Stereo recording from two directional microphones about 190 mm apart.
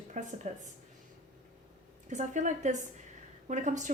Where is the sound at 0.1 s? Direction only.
40° right (ahead or behind).